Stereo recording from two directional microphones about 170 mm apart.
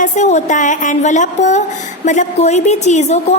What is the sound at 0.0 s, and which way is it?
A woman's voice, 45° left (ahead or behind).